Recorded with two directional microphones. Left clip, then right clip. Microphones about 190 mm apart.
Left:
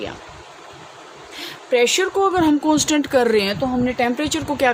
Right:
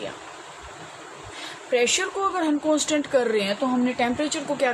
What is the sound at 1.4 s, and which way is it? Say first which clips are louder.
Speech: left 5 dB; 50° left (ahead or behind).